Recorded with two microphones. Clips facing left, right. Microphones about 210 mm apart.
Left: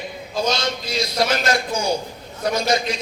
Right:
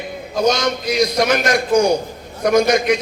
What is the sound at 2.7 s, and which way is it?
Speech, 30° left (ahead or behind).